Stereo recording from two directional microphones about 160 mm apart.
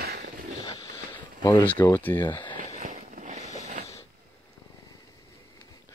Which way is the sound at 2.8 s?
50° right (ahead or behind).